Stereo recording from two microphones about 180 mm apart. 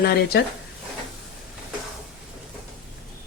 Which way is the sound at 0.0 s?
65° left (ahead or behind).